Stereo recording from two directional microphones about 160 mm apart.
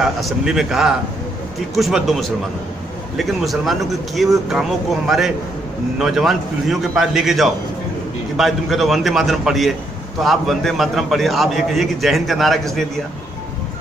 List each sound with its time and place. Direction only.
0.0 s a man's voice: centre (ahead or behind)